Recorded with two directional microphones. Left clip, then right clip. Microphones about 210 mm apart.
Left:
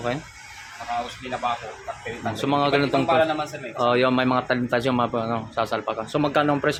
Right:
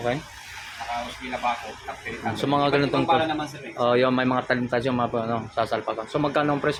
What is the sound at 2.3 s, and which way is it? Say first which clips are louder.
A man's voice: left 1 dB; centre (ahead or behind).